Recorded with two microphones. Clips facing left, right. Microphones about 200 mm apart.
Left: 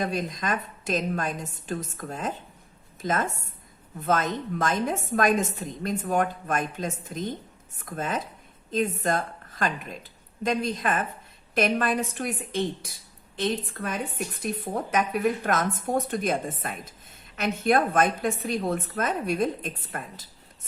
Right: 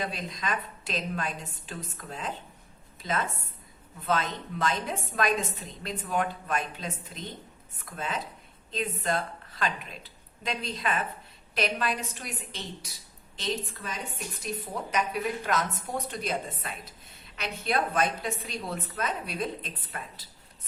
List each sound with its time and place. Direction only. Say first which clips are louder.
0.0 s a woman's voice: left 6 dB; 45° left (ahead or behind)